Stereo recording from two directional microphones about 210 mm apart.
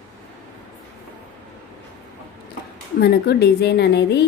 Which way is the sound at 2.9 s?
50° left (ahead or behind).